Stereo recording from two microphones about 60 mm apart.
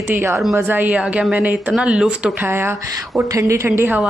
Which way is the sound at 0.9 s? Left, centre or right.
Right.